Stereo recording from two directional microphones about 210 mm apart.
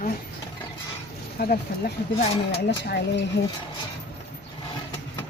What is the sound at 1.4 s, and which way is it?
Speech, 45° left (ahead or behind).